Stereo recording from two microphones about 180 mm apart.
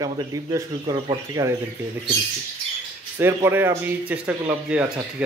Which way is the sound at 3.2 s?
15° right (ahead or behind).